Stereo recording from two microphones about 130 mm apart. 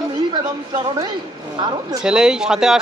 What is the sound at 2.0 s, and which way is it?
Speech, 5° right (ahead or behind).